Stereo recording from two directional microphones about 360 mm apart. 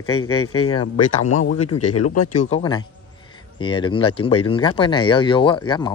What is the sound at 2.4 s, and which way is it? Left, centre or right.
Speech, centre.